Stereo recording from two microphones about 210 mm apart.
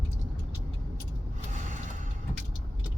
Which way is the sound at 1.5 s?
35° right (ahead or behind).